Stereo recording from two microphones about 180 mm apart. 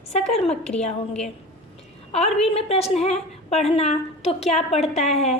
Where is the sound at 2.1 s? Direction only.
35° left (ahead or behind).